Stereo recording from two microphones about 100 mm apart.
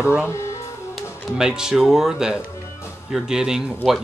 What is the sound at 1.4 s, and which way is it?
Speech, 5° right (ahead or behind).